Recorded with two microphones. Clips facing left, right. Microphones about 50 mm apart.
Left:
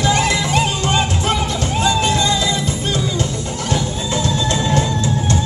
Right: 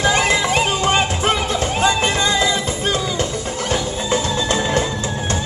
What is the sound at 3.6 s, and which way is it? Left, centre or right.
Music, right.